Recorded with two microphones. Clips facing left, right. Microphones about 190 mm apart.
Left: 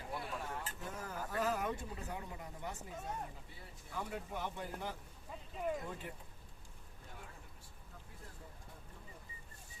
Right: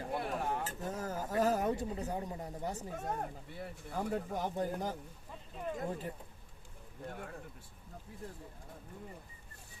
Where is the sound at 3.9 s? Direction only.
40° right (ahead or behind).